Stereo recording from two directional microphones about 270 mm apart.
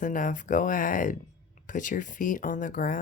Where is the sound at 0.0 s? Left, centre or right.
Left.